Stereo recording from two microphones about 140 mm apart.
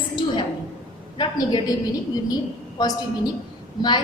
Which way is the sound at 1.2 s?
30° left (ahead or behind).